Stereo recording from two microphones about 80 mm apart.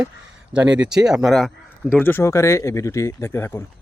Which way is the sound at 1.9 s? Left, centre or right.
Left.